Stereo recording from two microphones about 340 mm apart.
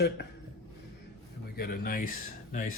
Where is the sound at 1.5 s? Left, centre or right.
Left.